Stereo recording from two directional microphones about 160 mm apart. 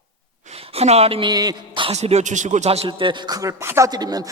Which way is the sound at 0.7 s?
40° right (ahead or behind).